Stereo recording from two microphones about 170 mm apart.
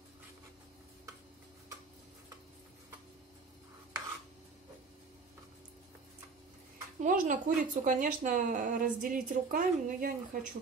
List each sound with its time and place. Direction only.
7.0 s a woman's voice: 50° right (ahead or behind)